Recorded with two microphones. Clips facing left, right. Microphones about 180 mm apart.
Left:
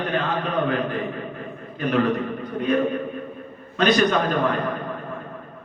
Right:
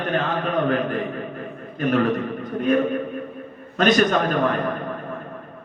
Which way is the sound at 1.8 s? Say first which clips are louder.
Right 1 dB; 45° right (ahead or behind).